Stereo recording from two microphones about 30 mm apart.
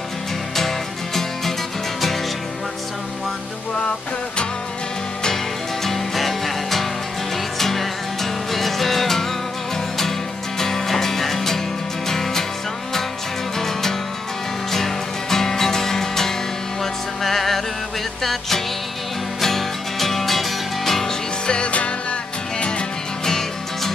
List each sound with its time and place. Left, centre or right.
0.6 s music: centre
5.9 s music: centre
10.6 s music: centre
13.6 s music: centre
20.8 s music: centre
21.5 s music: left
23.2 s music: centre